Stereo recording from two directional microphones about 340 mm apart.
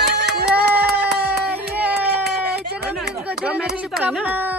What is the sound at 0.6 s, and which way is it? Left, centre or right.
Speech, right.